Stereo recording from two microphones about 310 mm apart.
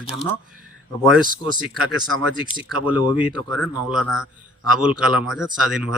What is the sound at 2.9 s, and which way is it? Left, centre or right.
Speech, centre.